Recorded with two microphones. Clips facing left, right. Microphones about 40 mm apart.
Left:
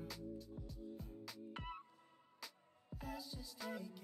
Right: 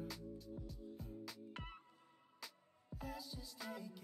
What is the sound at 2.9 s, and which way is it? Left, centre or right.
Music, centre.